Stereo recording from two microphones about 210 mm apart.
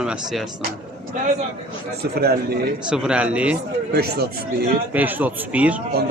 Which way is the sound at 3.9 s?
50° right (ahead or behind).